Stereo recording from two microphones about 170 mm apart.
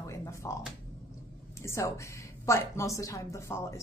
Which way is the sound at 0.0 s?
15° left (ahead or behind).